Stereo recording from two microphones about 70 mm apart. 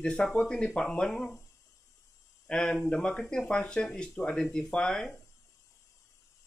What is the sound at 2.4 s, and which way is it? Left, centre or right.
Speech, centre.